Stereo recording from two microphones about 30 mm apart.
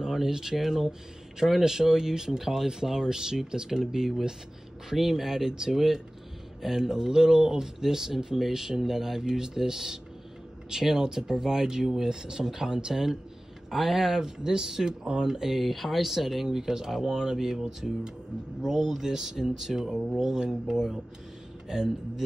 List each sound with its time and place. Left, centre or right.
0.0 s speech: centre
14.9 s speech: right
15.2 s speech: centre
15.6 s speech: centre
16.5 s speech: centre